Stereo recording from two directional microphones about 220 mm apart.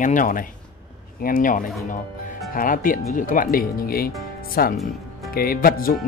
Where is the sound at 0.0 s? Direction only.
35° left (ahead or behind).